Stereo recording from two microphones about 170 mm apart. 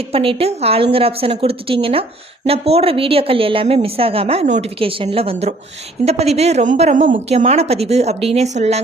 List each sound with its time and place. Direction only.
0.1 s speech: 35° right (ahead or behind)